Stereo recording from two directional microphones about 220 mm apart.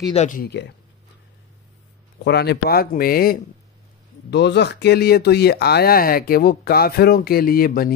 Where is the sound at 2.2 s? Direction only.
50° left (ahead or behind).